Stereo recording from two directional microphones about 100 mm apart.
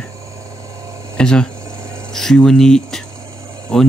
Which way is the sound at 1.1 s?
10° left (ahead or behind).